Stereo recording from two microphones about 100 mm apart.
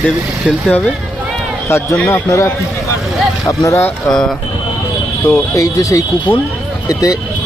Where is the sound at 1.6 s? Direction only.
30° left (ahead or behind).